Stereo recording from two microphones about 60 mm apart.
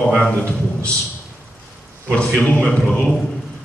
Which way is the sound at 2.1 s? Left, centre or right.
Left.